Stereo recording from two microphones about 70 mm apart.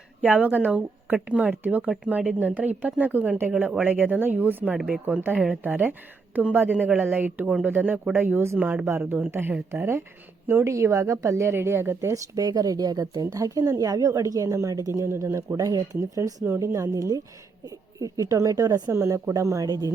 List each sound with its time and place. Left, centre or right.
0.2 s a woman's voice: right
11.5 s speech: right
12.1 s speech: right
13.3 s a woman's voice: right
15.0 s speech: right
15.6 s a woman's voice: right
16.5 s a woman's voice: right
19.6 s speech: right